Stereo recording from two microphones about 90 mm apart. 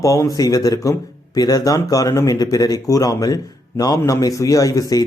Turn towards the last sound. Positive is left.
turn(degrees=40)  # may be behind; listen again after turning